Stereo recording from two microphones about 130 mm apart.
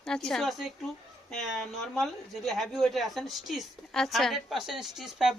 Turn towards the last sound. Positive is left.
turn(degrees=-5)  # may be behind; listen again after turning